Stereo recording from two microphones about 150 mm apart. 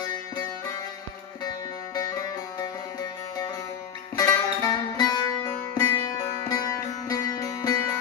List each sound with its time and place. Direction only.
0.0 s music: 30° left (ahead or behind)
2.0 s music: 25° left (ahead or behind)